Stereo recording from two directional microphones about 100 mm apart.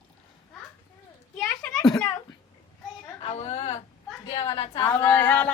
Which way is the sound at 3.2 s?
90° left.